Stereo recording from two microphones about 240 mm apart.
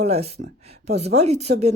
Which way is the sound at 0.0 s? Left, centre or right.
Right.